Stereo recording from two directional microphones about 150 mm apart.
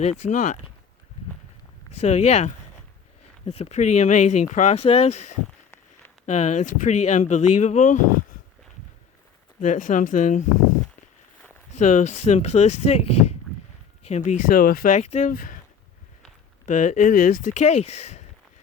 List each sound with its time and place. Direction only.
0.0 s speech: 50° left (ahead or behind)
2.0 s speech: 45° left (ahead or behind)
9.6 s speech: 60° left (ahead or behind)
11.8 s speech: 55° left (ahead or behind); by 14.9 s 80° left
14.9 s speech: 50° left (ahead or behind)
15.3 s speech: 70° left (ahead or behind)
16.6 s speech: 55° left (ahead or behind)